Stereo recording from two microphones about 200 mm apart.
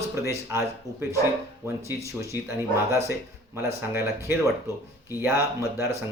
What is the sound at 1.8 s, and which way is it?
Speech, 15° right (ahead or behind).